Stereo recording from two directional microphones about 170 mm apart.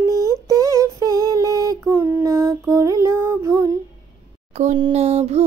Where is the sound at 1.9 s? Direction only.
10° right (ahead or behind).